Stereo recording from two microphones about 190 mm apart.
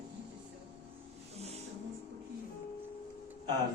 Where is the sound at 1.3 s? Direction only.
35° right (ahead or behind).